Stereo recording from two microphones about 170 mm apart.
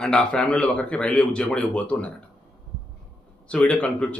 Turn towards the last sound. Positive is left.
turn(degrees=5)  # may be behind; listen again after turning